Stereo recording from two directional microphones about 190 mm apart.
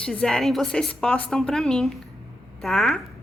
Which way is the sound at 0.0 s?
5° left (ahead or behind).